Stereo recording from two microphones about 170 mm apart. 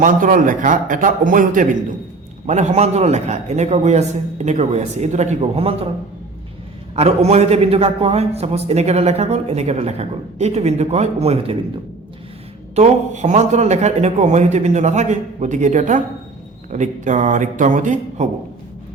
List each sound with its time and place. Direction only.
0.0 s a man's voice: 50° right (ahead or behind); by 5.9 s 35° right (ahead or behind)
6.9 s a man's voice: 40° right (ahead or behind)
12.7 s a man's voice: 45° right (ahead or behind)